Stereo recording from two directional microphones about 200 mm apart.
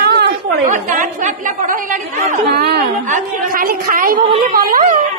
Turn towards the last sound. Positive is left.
turn(degrees=-45)  # may be behind; listen again after turning